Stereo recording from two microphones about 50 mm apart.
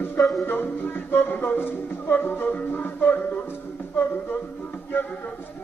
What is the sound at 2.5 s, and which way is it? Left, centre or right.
Music, left.